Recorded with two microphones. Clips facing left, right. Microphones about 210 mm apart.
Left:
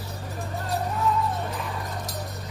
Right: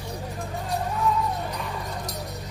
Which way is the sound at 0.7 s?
Centre (ahead or behind).